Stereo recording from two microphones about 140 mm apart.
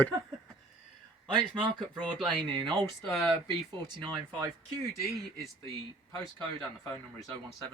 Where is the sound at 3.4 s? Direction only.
30° right (ahead or behind).